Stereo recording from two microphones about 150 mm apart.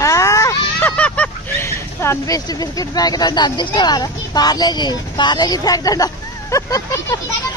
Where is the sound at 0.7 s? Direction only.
10° left (ahead or behind).